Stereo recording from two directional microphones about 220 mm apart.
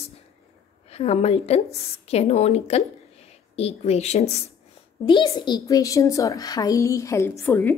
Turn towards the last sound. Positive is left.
turn(degrees=10)  # may be behind; listen again after turning